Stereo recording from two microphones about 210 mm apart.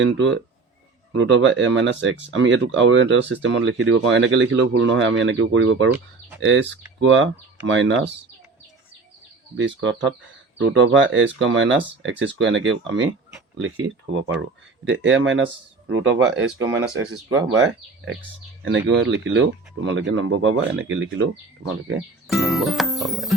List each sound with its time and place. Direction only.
0.0 s speech: 60° right (ahead or behind)
9.6 s speech: 60° right (ahead or behind)
17.5 s speech: 60° right (ahead or behind)
22.3 s music: centre (ahead or behind)